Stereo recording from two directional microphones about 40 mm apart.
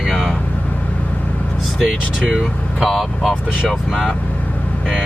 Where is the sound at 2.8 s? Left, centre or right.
Centre.